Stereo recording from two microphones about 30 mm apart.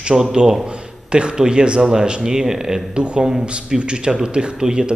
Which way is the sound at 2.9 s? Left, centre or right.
Right.